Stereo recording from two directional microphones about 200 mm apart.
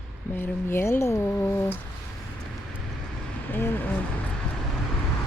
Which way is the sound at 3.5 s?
10° left (ahead or behind).